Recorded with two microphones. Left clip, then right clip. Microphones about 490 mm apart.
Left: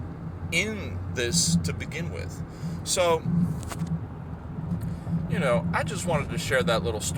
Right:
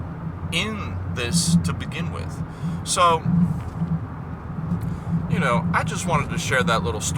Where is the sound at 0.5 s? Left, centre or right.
Left.